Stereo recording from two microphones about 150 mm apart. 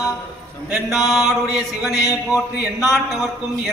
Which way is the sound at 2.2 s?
5° right (ahead or behind).